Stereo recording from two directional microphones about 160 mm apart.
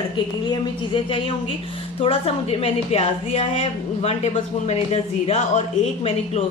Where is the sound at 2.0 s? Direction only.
35° left (ahead or behind).